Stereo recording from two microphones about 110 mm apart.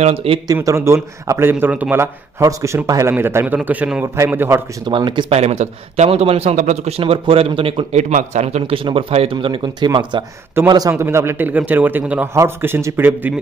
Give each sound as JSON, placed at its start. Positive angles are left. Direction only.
{"t": 0.0, "sound": "speech", "side_deg": -60}
{"t": 0.7, "sound": "a man's voice", "side_deg": -25}
{"t": 4.8, "sound": "speech", "side_deg": -45}
{"t": 5.3, "sound": "a man's voice", "side_deg": -80}
{"t": 10.7, "sound": "a man's voice", "side_deg": -30}